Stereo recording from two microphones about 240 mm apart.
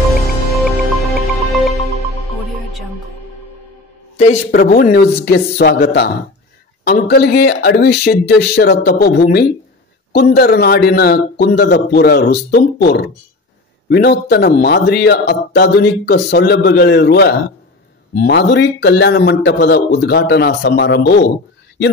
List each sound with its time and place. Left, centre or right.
0.5 s music: centre
4.5 s a man's voice: left